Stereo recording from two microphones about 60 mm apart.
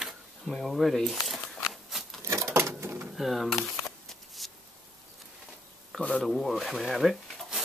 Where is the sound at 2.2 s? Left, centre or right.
Right.